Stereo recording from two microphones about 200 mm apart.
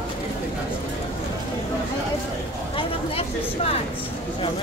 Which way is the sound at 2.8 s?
30° left (ahead or behind).